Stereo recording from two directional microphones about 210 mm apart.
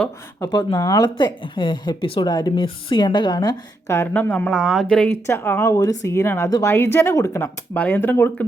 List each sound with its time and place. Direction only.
0.4 s speech: 20° left (ahead or behind)